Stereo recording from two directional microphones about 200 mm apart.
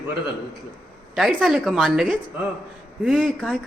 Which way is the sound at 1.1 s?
Centre (ahead or behind).